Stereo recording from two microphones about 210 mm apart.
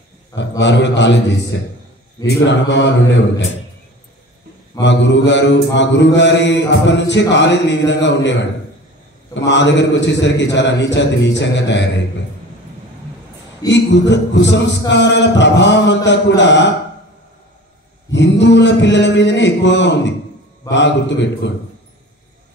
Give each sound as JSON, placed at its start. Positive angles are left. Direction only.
{"t": 0.4, "sound": "mantra", "side_deg": 60}
{"t": 4.8, "sound": "mantra", "side_deg": 55}
{"t": 9.5, "sound": "mantra", "side_deg": 55}
{"t": 13.7, "sound": "mantra", "side_deg": 55}
{"t": 18.1, "sound": "mantra", "side_deg": 55}